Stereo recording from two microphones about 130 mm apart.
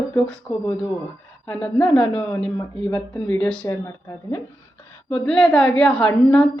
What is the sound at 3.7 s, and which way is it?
Speech, 25° left (ahead or behind).